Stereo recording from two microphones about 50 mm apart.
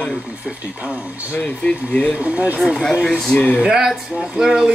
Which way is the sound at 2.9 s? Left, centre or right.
Centre.